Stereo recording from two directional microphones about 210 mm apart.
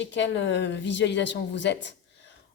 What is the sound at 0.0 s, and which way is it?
Speech, 60° left (ahead or behind).